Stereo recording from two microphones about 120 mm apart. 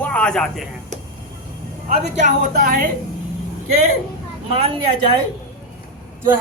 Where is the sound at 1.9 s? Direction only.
80° right.